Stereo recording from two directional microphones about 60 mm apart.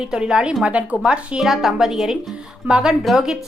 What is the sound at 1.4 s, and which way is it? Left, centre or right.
A woman's voice, centre.